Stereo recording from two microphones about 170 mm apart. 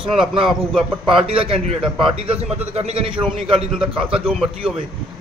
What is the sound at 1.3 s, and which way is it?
Speech, 30° right (ahead or behind).